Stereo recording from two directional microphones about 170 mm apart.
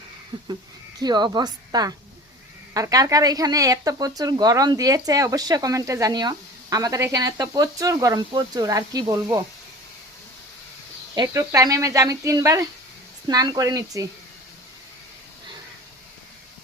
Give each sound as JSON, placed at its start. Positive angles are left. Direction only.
{"t": 0.9, "sound": "speech", "side_deg": -25}
{"t": 11.1, "sound": "speech", "side_deg": -20}